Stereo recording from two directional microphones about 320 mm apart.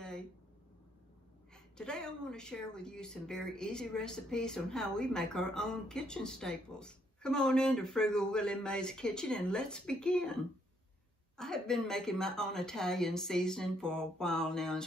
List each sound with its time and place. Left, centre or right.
1.5 s a woman's voice: centre
11.3 s a woman's voice: centre